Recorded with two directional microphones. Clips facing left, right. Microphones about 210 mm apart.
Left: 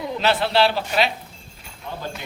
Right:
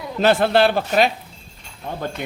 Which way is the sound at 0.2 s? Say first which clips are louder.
Right 4 dB; 50° right (ahead or behind).